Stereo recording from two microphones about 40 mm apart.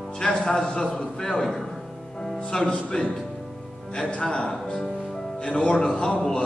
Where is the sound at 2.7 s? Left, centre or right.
Centre.